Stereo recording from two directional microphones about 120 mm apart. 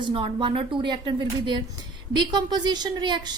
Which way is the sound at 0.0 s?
45° right (ahead or behind).